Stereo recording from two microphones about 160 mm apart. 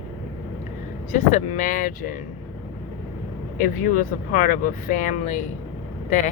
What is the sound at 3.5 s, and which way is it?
Speech, 55° left (ahead or behind).